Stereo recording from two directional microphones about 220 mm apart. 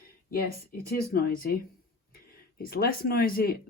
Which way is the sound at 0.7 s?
40° left (ahead or behind).